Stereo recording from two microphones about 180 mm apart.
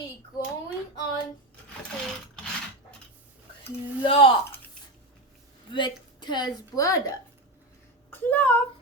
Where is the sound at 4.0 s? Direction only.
30° left (ahead or behind).